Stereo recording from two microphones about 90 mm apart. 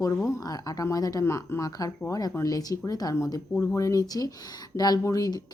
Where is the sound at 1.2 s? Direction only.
30° left (ahead or behind).